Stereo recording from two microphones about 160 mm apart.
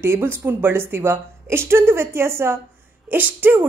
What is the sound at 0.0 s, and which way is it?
A woman's voice, 15° right (ahead or behind).